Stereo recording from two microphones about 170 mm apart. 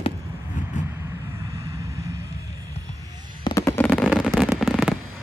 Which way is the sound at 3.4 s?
15° left (ahead or behind).